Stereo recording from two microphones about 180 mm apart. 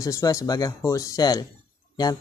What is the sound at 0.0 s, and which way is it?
Speech, 20° left (ahead or behind).